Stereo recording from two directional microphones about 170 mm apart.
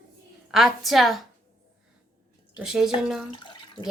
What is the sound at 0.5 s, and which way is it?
Speech, centre (ahead or behind).